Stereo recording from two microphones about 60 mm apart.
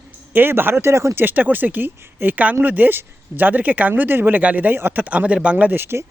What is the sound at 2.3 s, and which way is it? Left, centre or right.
Speech, right.